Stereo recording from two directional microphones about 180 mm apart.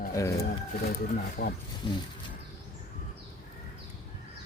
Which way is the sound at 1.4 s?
65° left (ahead or behind).